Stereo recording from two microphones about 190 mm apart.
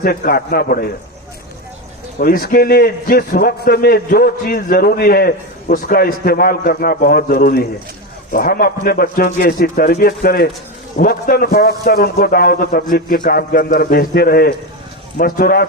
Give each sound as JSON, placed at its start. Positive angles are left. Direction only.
{"t": 0.0, "sound": "a man's voice", "side_deg": 50}
{"t": 2.1, "sound": "a man's voice", "side_deg": 50}